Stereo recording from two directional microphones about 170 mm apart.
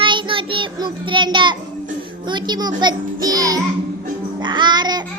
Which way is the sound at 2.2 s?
25° right (ahead or behind).